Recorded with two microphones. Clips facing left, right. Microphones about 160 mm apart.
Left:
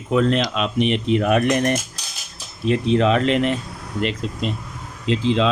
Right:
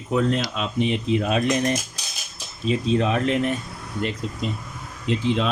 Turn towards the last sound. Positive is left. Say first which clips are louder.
# left 4 dB
turn(degrees=90)